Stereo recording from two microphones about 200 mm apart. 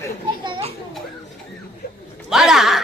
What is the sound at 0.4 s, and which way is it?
Children playing, 25° right (ahead or behind).